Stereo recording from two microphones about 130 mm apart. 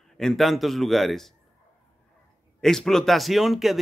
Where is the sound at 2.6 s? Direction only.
5° left (ahead or behind).